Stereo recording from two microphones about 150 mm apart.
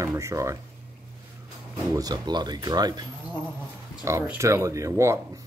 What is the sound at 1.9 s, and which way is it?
Speech, 25° right (ahead or behind).